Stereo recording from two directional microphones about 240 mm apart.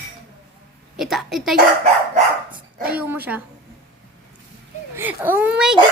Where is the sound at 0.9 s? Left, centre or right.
Centre.